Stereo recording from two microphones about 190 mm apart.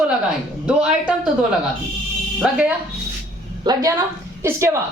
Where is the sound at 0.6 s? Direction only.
5° right (ahead or behind).